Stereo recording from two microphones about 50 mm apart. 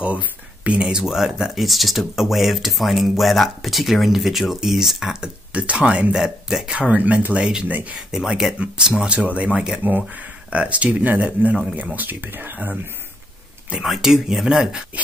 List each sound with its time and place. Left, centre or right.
0.0 s a sound: right
0.8 s speech: centre
5.2 s speech: right
6.1 s speech: centre
6.8 s speech: right
8.1 s speech: centre
8.5 s speech: right
13.8 s speech: centre